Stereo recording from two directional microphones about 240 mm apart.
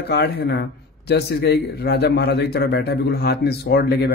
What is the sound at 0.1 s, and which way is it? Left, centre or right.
A man's voice, left.